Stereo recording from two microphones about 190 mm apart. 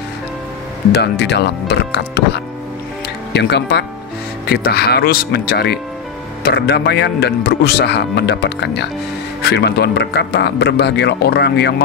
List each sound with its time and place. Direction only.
0.9 s speech: 65° left (ahead or behind)